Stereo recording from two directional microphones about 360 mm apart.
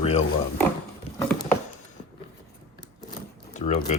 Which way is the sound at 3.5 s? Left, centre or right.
Centre.